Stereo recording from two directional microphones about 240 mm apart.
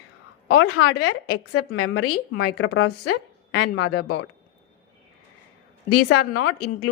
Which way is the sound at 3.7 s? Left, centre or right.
Left.